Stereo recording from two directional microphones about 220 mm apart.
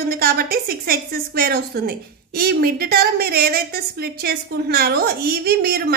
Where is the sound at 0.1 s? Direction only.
45° right (ahead or behind).